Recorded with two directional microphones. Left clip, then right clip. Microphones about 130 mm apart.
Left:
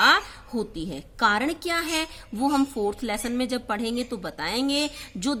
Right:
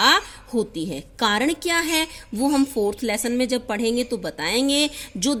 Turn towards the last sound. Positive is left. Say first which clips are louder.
# right 4 dB
turn(degrees=-20)  # may be behind; listen again after turning